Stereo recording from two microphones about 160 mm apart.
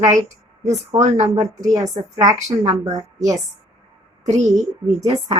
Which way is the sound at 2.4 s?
45° right (ahead or behind).